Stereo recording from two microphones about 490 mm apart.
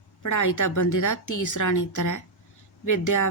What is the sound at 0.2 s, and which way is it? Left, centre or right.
A woman's voice, left.